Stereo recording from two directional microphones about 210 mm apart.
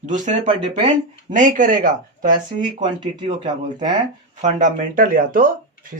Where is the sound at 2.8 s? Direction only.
20° right (ahead or behind).